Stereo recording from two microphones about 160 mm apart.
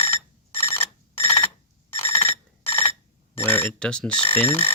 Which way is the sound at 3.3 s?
10° left (ahead or behind).